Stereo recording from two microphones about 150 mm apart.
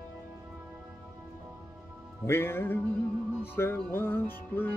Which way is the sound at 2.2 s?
15° left (ahead or behind).